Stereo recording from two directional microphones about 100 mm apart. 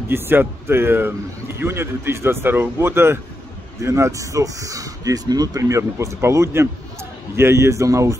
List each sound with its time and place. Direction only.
0.1 s speech: 20° right (ahead or behind)